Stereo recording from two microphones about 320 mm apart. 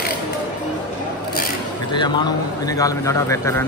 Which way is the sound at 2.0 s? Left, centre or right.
Centre.